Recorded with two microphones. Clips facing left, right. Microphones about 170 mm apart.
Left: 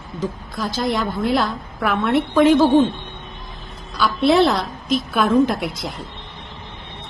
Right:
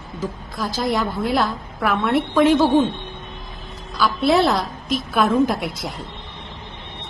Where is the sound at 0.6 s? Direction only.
Centre (ahead or behind).